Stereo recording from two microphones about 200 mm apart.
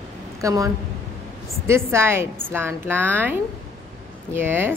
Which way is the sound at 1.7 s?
15° right (ahead or behind).